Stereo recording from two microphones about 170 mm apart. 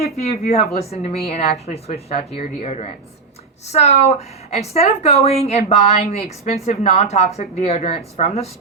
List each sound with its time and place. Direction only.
0.0 s a woman's voice: 40° left (ahead or behind)